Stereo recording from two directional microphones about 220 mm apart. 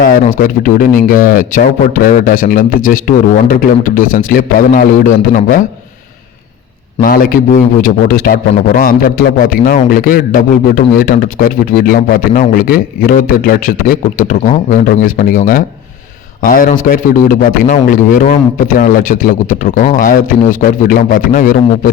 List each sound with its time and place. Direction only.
0.0 s a man's voice: 40° left (ahead or behind)
7.0 s a man's voice: 40° left (ahead or behind)